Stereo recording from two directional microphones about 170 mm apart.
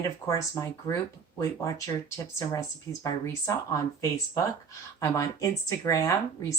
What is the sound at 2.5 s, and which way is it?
Speech, 15° left (ahead or behind).